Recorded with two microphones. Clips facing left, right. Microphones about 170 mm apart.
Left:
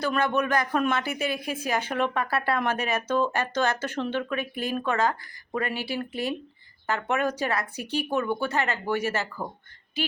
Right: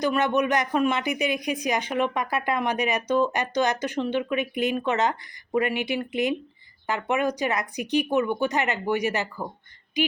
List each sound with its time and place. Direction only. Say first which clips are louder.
0.0 s speech: right 2 dB; 15° right (ahead or behind)